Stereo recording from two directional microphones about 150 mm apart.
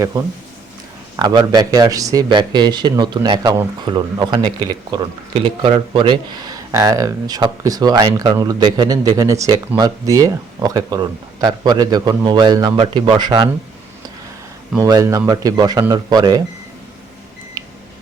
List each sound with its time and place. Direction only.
1.1 s speech: 25° right (ahead or behind)
14.8 s speech: 20° right (ahead or behind)